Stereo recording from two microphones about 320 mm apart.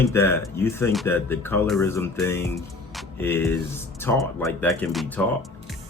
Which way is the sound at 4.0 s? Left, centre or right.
Centre.